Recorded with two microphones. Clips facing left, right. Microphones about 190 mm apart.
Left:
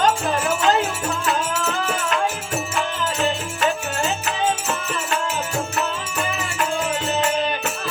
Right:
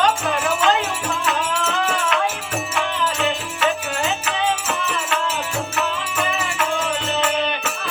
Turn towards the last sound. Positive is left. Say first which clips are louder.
# even
turn(degrees=40)  # may be behind; listen again after turning